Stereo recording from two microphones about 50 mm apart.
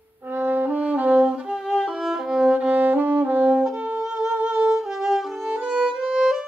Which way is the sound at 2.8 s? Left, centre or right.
Right.